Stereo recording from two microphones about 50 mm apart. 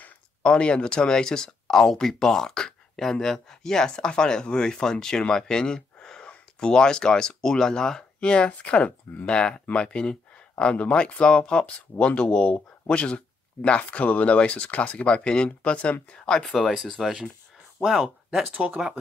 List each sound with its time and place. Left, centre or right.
0.4 s speech: left
16.3 s speech: centre